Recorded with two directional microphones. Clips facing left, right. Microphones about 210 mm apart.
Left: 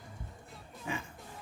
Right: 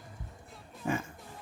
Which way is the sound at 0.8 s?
45° right (ahead or behind).